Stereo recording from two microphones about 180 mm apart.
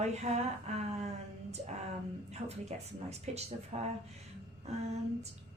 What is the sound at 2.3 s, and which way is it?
Speech, 35° right (ahead or behind).